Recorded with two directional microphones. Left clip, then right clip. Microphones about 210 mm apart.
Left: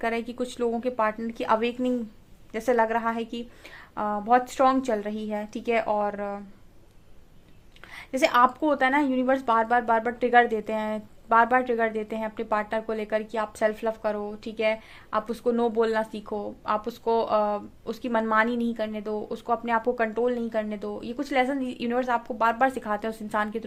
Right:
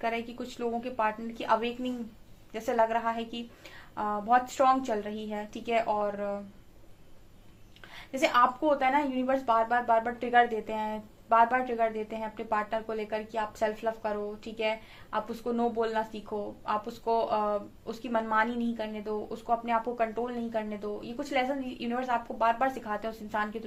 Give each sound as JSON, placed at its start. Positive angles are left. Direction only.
{"t": 0.0, "sound": "speech", "side_deg": 45}
{"t": 7.9, "sound": "speech", "side_deg": 50}